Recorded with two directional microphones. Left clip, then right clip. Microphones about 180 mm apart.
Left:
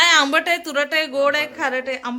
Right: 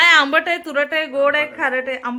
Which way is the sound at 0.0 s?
5° left (ahead or behind).